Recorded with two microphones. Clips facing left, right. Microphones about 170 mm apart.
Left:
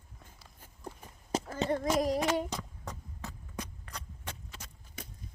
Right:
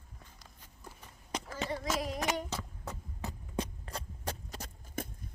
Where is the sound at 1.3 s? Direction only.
25° left (ahead or behind).